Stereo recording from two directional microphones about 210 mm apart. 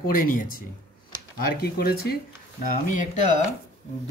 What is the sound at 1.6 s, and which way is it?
Speech, 50° left (ahead or behind).